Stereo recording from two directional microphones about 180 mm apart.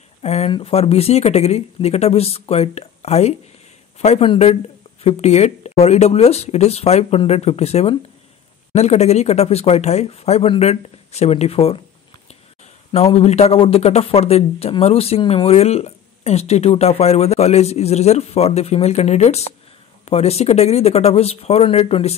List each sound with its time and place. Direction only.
0.2 s speech: 35° left (ahead or behind)
12.9 s speech: 35° left (ahead or behind)